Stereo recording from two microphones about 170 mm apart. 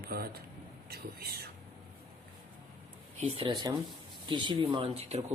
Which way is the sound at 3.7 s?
20° right (ahead or behind).